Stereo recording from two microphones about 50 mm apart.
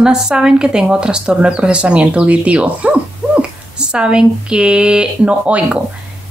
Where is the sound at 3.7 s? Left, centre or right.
Centre.